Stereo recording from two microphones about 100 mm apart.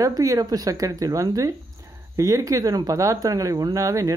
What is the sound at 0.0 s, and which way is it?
Speech, 35° right (ahead or behind).